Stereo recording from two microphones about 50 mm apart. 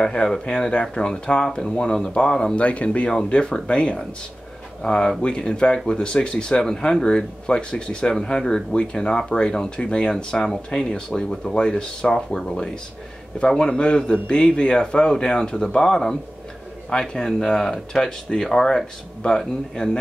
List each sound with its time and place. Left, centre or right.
0.0 s speech: centre